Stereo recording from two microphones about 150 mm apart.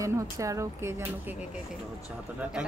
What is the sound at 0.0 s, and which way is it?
A woman's voice, 20° right (ahead or behind).